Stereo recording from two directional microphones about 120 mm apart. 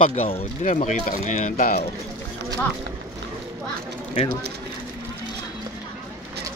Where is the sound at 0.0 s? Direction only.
90° left.